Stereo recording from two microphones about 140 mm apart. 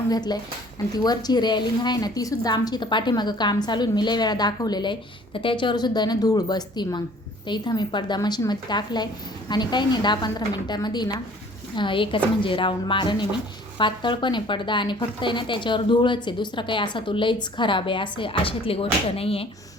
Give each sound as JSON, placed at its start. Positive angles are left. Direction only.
{"t": 0.1, "sound": "a woman's voice", "side_deg": 30}